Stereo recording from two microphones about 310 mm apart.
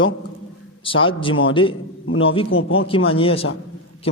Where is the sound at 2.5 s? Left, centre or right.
Left.